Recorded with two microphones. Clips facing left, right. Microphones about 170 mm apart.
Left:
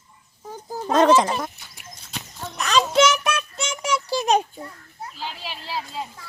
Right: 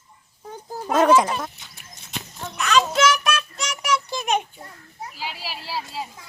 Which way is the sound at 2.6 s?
35° left (ahead or behind).